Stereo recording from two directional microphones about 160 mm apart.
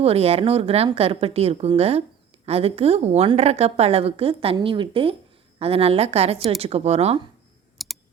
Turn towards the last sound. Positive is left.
turn(degrees=0)  # may be behind; listen again after turning